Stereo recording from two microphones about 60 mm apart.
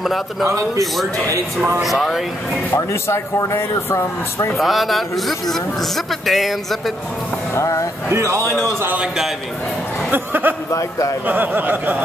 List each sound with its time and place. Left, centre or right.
0.0 s a man's voice: centre
0.5 s a man's voice: right
1.8 s a man's voice: centre
2.7 s speech: left
3.3 s speech: left
4.6 s a man's voice: centre
7.5 s speech: left
8.1 s a man's voice: right
10.1 s a sound: right
10.7 s a man's voice: left
11.2 s speech: right